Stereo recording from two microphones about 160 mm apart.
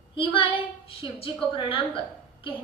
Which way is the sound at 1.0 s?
30° left (ahead or behind).